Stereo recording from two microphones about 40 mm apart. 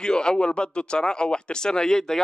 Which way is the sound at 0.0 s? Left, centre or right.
Centre.